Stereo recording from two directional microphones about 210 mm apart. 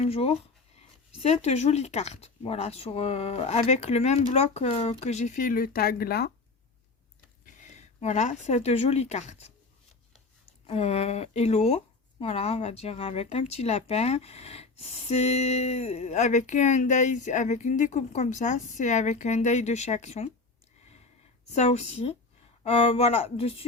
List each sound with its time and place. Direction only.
0.0 s speech: 30° left (ahead or behind); by 6.3 s 50° left (ahead or behind)
7.4 s speech: 35° left (ahead or behind)
10.7 s speech: 30° left (ahead or behind)
21.5 s speech: 30° left (ahead or behind)